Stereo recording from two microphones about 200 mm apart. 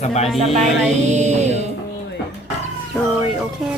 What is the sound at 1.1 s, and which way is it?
Music, 35° right (ahead or behind).